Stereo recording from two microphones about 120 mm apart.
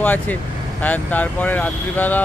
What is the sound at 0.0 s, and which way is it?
Speech, 15° left (ahead or behind).